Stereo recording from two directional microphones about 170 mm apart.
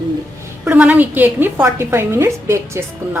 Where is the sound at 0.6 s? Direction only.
10° right (ahead or behind).